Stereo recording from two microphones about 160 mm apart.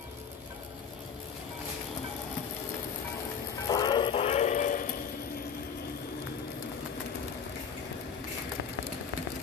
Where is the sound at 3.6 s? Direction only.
25° left (ahead or behind); by 4.8 s 55° left (ahead or behind).